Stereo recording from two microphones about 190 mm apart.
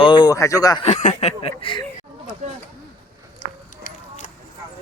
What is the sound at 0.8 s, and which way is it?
Speech, 40° left (ahead or behind).